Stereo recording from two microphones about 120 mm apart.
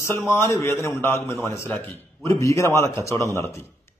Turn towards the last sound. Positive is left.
turn(degrees=25)  # may be behind; listen again after turning